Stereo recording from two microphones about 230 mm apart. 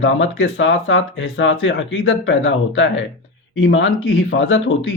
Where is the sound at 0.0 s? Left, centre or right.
Left.